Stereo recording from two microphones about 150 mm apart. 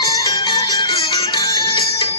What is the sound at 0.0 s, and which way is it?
Music, 25° left (ahead or behind).